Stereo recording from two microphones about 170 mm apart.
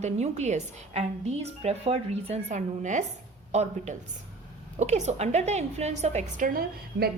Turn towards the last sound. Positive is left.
turn(degrees=-60)  # may be behind; listen again after turning